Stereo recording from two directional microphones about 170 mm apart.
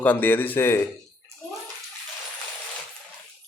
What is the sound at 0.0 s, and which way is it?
Speech, 10° left (ahead or behind).